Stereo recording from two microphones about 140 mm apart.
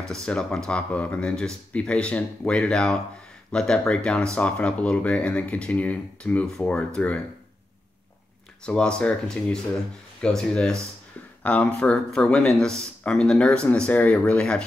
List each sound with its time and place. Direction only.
0.1 s speech: 5° left (ahead or behind)
8.6 s speech: 5° left (ahead or behind)